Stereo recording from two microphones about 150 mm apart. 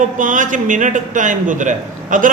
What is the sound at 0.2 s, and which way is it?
A man's voice, 60° right (ahead or behind).